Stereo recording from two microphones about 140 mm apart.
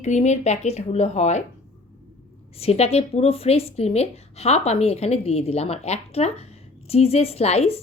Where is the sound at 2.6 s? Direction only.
45° left (ahead or behind).